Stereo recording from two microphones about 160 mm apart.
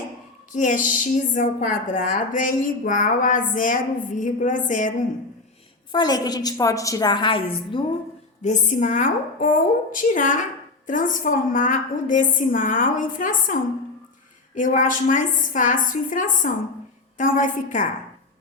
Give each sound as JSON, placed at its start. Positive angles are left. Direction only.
{"t": 0.5, "sound": "a woman's voice", "side_deg": 50}
{"t": 5.9, "sound": "a woman's voice", "side_deg": 25}
{"t": 8.4, "sound": "a woman's voice", "side_deg": 50}